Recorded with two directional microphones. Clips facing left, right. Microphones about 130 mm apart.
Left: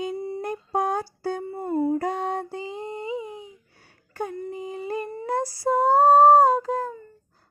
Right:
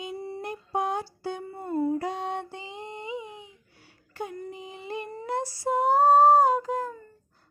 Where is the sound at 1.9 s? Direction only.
50° left (ahead or behind).